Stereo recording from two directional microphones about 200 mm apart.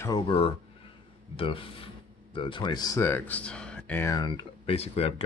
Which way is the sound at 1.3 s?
25° left (ahead or behind).